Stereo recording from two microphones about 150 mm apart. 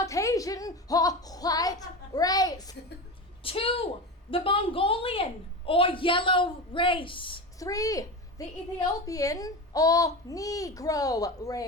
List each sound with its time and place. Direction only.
0.0 s speech: 20° left (ahead or behind)
3.4 s a woman's voice: 40° left (ahead or behind)
7.6 s a woman's voice: 20° left (ahead or behind)